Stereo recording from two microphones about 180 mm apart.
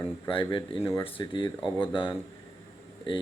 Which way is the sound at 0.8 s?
15° left (ahead or behind).